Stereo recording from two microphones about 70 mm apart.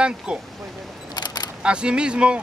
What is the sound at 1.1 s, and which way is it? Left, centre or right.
Single-lens reflex camera, left.